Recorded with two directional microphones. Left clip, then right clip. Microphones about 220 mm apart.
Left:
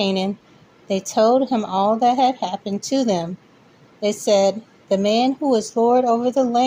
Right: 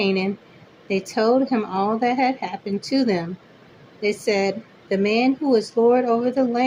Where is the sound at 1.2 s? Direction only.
25° left (ahead or behind).